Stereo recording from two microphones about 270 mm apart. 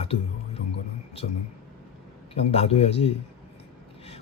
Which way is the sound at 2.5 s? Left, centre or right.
Left.